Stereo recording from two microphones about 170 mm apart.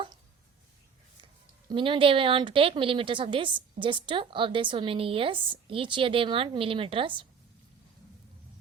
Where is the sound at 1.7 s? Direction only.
30° right (ahead or behind).